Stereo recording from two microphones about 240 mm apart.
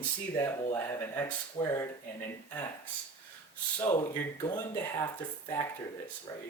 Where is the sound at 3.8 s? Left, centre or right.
Centre.